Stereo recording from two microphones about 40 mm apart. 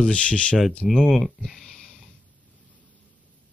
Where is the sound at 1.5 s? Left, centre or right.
Centre.